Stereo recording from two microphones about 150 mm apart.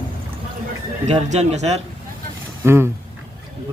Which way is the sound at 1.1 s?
45° right (ahead or behind).